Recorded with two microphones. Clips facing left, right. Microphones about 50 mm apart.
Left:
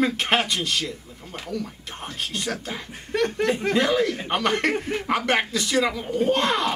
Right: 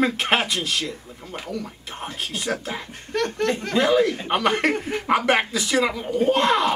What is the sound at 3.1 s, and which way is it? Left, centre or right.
Chuckle, centre.